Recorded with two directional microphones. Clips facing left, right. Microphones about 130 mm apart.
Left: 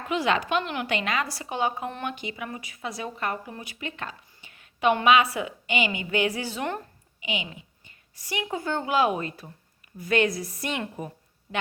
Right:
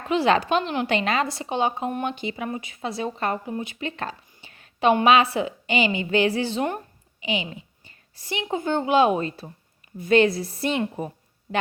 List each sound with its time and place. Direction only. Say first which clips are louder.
0.1 s a woman's voice: right 5 dB; 30° right (ahead or behind)